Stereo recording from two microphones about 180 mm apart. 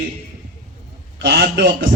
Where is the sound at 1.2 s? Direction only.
65° right (ahead or behind).